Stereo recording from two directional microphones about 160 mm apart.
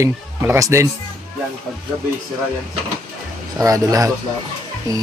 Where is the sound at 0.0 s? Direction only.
20° right (ahead or behind).